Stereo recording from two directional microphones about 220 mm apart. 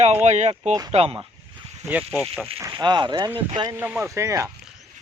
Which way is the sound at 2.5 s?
15° right (ahead or behind).